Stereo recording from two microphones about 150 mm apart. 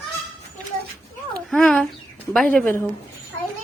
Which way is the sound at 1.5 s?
5° left (ahead or behind).